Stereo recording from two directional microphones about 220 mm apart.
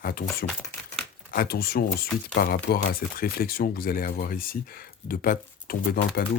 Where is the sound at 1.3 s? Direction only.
45° left (ahead or behind).